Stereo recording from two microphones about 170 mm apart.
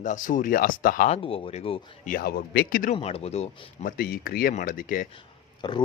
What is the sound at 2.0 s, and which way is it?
Speech, 60° left (ahead or behind).